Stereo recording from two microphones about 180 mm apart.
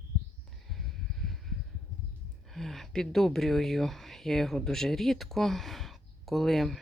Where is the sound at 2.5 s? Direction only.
Centre (ahead or behind).